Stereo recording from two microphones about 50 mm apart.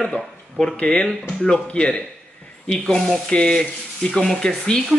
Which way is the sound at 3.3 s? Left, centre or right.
Centre.